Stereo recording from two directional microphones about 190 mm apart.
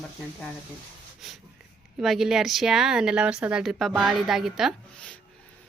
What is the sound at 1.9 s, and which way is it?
A woman's voice, centre (ahead or behind).